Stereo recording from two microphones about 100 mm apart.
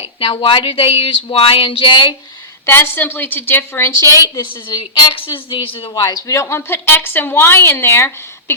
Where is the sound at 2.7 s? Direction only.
20° left (ahead or behind); by 6.0 s 60° left (ahead or behind).